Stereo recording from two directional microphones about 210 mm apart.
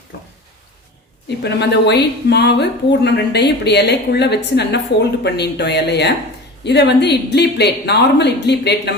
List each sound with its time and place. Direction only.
1.4 s a woman's voice: 55° left (ahead or behind)